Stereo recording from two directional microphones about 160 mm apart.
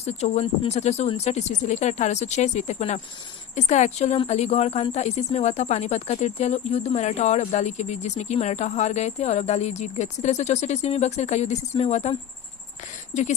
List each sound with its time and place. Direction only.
0.0 s speech: 40° left (ahead or behind)